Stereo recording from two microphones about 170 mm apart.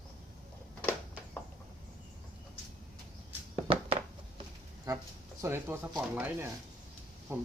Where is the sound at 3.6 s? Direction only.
35° right (ahead or behind).